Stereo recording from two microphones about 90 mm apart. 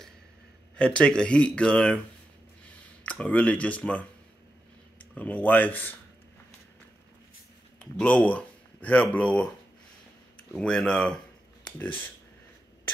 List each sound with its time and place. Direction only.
0.7 s speech: 10° left (ahead or behind)
3.0 s speech: 15° left (ahead or behind)
5.1 s speech: 20° left (ahead or behind)
7.8 s speech: 15° left (ahead or behind)
10.5 s speech: 10° left (ahead or behind)